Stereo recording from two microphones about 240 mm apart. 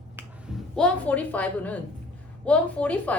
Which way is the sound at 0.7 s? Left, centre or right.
Centre.